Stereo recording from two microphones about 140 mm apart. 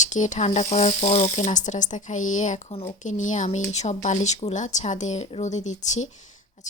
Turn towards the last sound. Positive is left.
turn(degrees=55)  # may be behind; listen again after turning